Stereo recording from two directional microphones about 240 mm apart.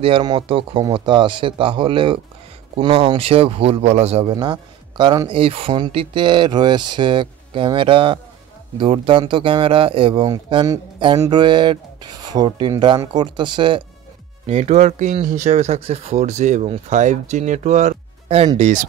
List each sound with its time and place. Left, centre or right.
0.0 s a man's voice: centre